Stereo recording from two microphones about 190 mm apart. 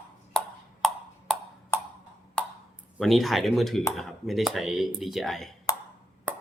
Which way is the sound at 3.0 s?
Centre (ahead or behind).